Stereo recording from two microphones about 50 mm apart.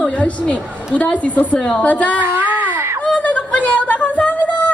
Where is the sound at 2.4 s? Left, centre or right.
Right.